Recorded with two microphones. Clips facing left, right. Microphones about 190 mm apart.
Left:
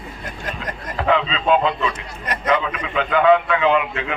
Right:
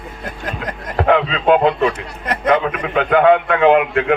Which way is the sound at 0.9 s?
55° right (ahead or behind).